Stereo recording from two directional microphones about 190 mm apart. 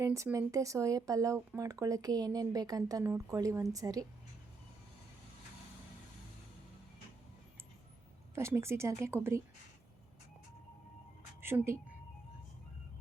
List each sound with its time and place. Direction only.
0.0 s speech: 15° right (ahead or behind)
8.4 s speech: 15° right (ahead or behind)
11.3 s speech: 10° right (ahead or behind)